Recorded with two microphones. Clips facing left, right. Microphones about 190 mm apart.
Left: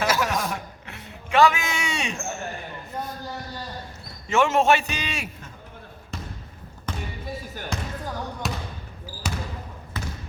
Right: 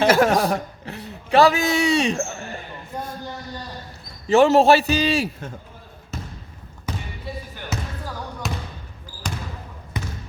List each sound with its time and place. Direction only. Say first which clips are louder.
0.1 s chuckle: right 8 dB; 55° right (ahead or behind)
0.3 s a sound: right 8 dB; 35° right (ahead or behind)
4.3 s a man's voice: right 6 dB; 35° right (ahead or behind)
6.9 s basketball bounce: right 1 dB; 10° right (ahead or behind)
8.4 s trickle: right 2 dB; centre (ahead or behind)
9.2 s basketball bounce: even; 5° left (ahead or behind)
10.0 s trickle: right 3 dB; 15° right (ahead or behind)